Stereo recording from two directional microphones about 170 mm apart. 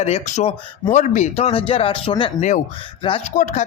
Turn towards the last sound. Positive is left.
turn(degrees=45)  # may be behind; listen again after turning